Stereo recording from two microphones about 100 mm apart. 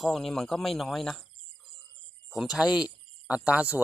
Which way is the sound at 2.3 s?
5° right (ahead or behind).